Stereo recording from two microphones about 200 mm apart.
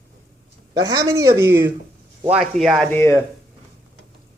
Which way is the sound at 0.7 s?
20° right (ahead or behind).